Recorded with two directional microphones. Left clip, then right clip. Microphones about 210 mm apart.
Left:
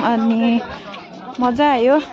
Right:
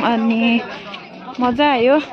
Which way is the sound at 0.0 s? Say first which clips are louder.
Even; 5° left (ahead or behind).